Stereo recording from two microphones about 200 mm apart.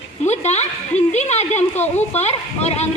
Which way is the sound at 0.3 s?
35° left (ahead or behind).